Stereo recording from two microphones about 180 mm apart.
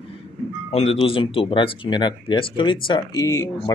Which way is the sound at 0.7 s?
35° left (ahead or behind).